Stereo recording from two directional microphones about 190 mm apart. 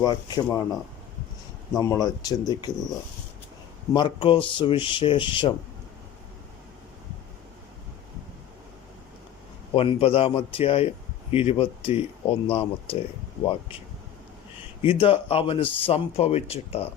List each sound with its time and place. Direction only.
0.0 s a man's voice: 20° left (ahead or behind)
1.8 s a man's voice: 20° left (ahead or behind)
3.9 s a man's voice: 25° left (ahead or behind)
9.7 s a man's voice: 30° left (ahead or behind)
14.8 s a man's voice: 30° left (ahead or behind)